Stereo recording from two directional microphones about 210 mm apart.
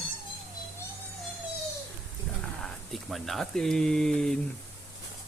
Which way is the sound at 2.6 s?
Centre (ahead or behind).